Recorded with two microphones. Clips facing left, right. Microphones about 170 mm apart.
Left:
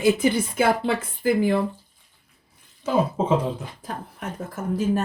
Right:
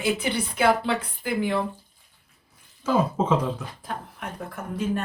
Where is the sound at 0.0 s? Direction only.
45° left (ahead or behind).